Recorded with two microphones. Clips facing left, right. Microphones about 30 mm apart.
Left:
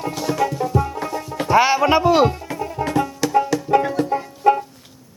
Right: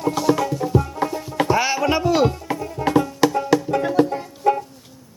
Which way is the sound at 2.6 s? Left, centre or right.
Left.